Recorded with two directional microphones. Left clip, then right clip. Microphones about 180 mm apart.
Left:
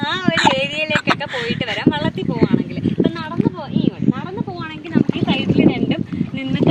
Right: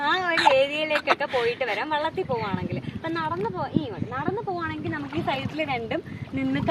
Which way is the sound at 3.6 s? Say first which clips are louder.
Left 6 dB; 20° right (ahead or behind).